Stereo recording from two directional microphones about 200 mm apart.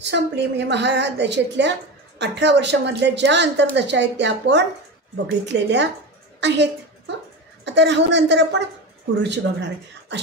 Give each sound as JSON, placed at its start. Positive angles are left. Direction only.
{"t": 0.0, "sound": "a woman's voice", "side_deg": -60}